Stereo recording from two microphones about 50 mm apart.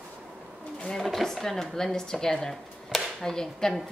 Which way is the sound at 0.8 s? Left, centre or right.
Centre.